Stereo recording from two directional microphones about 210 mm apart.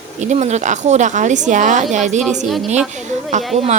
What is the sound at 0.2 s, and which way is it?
A woman's voice, 35° right (ahead or behind).